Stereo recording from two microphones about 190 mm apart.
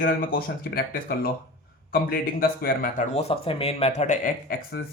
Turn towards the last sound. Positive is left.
turn(degrees=40)  # may be behind; listen again after turning